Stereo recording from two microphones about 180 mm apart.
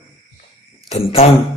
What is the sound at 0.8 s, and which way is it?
Speech, 35° left (ahead or behind).